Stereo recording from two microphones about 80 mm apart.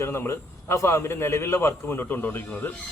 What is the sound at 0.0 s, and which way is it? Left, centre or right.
Speech, left.